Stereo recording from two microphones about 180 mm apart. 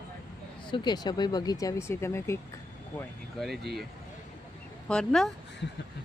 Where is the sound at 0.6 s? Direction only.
25° left (ahead or behind).